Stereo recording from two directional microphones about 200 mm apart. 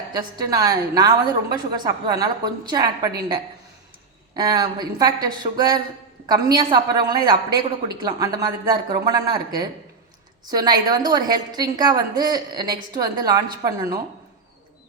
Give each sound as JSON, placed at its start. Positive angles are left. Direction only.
{"t": 0.1, "sound": "a woman's voice", "side_deg": -20}
{"t": 4.4, "sound": "a woman's voice", "side_deg": -20}